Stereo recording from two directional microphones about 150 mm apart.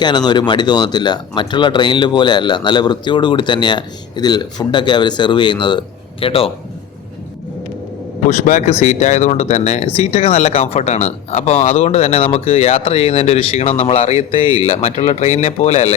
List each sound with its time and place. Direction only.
0.0 s speech: 30° left (ahead or behind)
8.3 s speech: 55° left (ahead or behind)